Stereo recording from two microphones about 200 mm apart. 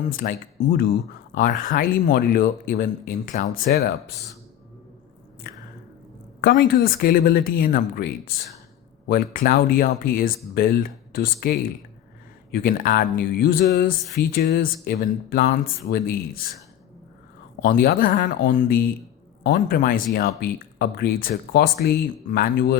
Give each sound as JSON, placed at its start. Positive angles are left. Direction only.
{"t": 0.0, "sound": "speech", "side_deg": 45}
{"t": 6.4, "sound": "speech", "side_deg": 50}
{"t": 17.6, "sound": "speech", "side_deg": 45}